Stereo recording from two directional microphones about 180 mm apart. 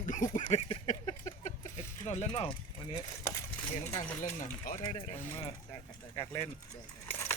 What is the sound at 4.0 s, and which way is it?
Speech, 45° left (ahead or behind).